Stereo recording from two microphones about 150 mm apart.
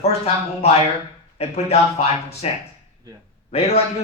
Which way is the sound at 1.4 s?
45° left (ahead or behind).